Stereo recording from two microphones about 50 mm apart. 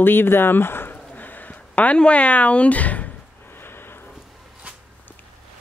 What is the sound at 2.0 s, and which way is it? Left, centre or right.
Speech, left.